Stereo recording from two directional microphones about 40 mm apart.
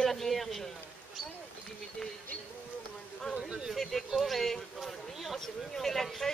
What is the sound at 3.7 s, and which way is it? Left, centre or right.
Speech, centre.